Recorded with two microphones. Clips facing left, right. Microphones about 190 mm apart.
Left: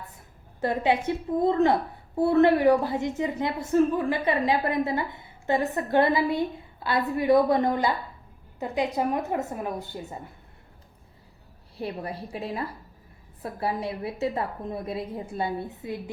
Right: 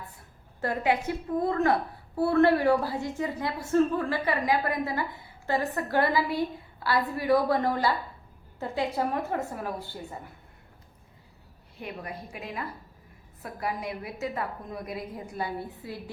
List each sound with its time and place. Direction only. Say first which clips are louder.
0.6 s a woman's voice: left 3 dB; 25° left (ahead or behind)
11.8 s a woman's voice: left 5 dB; 35° left (ahead or behind)